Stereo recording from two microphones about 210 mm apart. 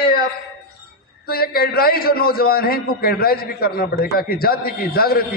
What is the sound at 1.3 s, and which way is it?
A man's voice, 45° left (ahead or behind).